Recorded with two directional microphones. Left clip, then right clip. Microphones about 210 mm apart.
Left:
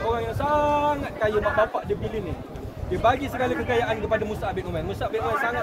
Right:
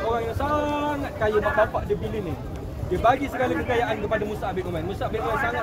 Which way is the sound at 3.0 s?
45° left (ahead or behind).